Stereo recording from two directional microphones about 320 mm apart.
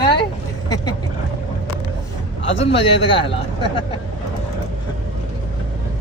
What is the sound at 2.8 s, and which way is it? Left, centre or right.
Speech, centre.